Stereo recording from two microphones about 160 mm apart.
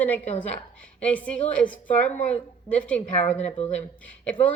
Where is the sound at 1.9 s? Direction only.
50° left (ahead or behind).